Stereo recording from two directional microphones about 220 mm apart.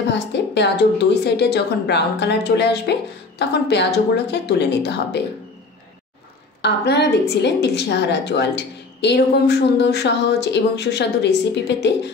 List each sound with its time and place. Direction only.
0.1 s a woman's voice: 50° left (ahead or behind)
6.6 s a woman's voice: 50° left (ahead or behind)